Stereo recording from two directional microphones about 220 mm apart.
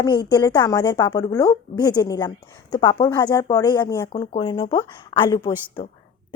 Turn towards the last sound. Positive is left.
turn(degrees=20)  # may be behind; listen again after turning